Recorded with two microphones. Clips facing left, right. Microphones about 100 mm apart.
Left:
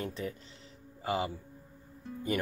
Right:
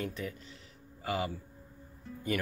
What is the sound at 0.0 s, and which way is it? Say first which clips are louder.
A man's voice: left 1 dB; 30° left (ahead or behind).